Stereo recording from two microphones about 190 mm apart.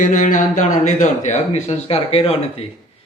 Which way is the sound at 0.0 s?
45° left (ahead or behind).